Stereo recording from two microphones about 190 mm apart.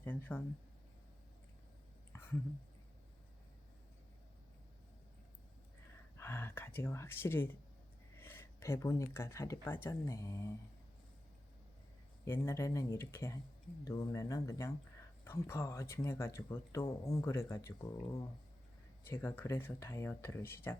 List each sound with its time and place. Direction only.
0.0 s speech: 10° left (ahead or behind)
6.1 s speech: 10° left (ahead or behind)
12.2 s speech: 15° left (ahead or behind)